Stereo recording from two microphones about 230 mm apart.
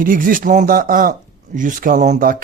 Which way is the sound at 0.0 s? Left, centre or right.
Right.